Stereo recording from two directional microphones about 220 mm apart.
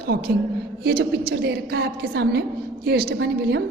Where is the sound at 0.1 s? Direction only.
45° right (ahead or behind).